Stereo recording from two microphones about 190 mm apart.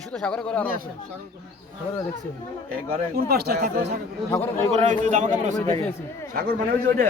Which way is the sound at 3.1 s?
55° right (ahead or behind).